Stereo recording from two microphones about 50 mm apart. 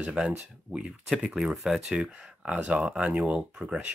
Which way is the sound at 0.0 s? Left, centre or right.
Centre.